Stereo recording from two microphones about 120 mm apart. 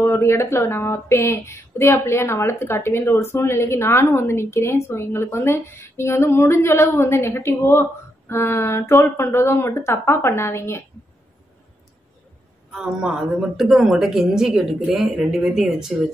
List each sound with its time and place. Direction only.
0.0 s speech: 20° left (ahead or behind)
12.7 s speech: 5° right (ahead or behind)